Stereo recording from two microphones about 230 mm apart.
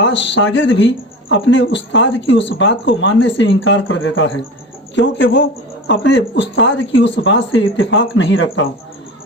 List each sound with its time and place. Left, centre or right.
0.0 s speech: left